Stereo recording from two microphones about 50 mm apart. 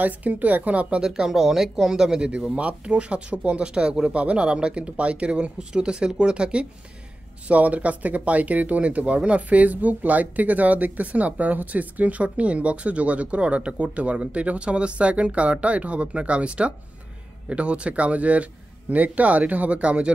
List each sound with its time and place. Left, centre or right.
0.0 s a woman's voice: right
0.8 s speech: centre
2.2 s speech: right